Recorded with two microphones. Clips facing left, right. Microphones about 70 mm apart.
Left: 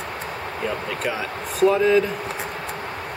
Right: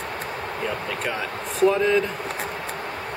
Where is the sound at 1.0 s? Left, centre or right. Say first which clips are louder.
Left 1 dB; centre.